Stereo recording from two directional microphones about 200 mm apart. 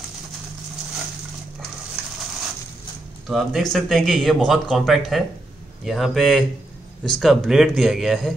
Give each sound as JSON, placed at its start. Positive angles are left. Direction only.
{"t": 3.3, "sound": "speech", "side_deg": 0}